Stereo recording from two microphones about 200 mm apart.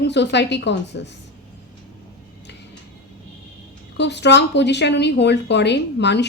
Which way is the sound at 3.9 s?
60° left (ahead or behind).